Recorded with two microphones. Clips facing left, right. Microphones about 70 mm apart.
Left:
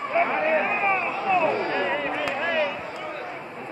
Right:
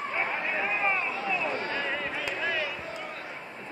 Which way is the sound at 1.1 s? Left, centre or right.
Left.